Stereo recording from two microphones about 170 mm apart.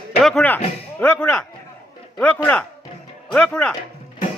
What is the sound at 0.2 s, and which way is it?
Speech, 5° left (ahead or behind).